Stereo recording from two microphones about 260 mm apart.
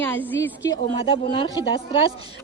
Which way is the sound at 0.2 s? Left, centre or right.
Centre.